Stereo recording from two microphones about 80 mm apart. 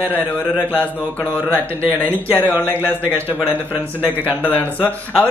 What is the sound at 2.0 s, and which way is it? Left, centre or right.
Speech, centre.